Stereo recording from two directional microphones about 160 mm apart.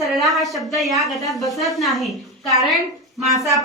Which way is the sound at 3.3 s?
20° left (ahead or behind).